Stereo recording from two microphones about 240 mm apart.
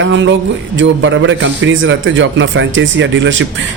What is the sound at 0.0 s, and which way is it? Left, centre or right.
Speech, right.